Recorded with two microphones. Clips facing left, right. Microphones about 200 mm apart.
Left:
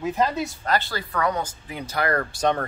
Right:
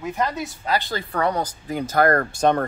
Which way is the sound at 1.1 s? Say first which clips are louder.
Right 2 dB; 35° right (ahead or behind).